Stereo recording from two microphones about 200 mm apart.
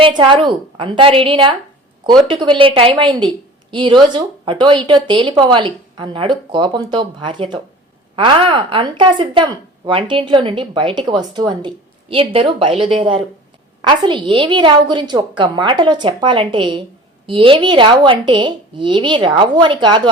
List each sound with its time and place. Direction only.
0.0 s a woman's voice: 25° right (ahead or behind)